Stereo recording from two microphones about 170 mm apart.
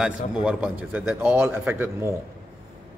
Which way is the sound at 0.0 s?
5° right (ahead or behind).